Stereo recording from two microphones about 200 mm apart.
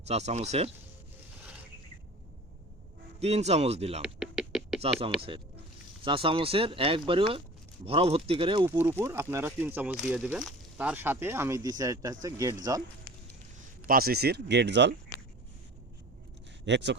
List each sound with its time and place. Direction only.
0.1 s speech: 35° right (ahead or behind)
3.2 s speech: 30° right (ahead or behind)
4.0 s music: centre (ahead or behind)
4.8 s speech: 30° right (ahead or behind)
8.8 s speech: 10° right (ahead or behind)
13.8 s speech: 45° right (ahead or behind)
16.6 s speech: 60° right (ahead or behind)